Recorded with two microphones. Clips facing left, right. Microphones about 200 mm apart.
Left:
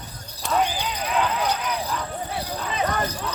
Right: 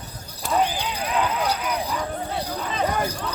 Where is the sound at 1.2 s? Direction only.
10° right (ahead or behind).